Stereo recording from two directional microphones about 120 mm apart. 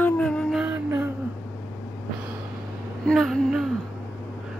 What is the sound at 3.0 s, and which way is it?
Speech, 5° left (ahead or behind).